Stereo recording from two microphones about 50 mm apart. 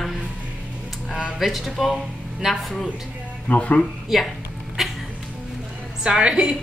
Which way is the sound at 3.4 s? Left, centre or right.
Left.